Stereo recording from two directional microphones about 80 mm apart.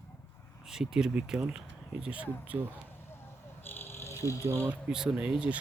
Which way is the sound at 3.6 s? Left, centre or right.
Left.